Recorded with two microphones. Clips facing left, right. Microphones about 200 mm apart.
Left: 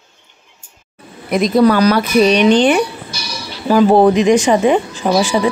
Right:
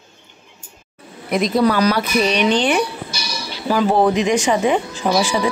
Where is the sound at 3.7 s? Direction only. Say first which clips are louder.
Left 6 dB; 40° left (ahead or behind).